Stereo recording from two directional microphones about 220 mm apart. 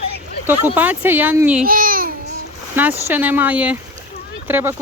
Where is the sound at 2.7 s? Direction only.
10° right (ahead or behind).